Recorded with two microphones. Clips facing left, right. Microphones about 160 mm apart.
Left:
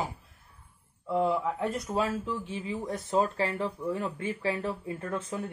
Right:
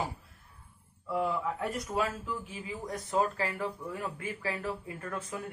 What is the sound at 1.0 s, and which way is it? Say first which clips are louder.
Speech: left 4 dB; 25° left (ahead or behind).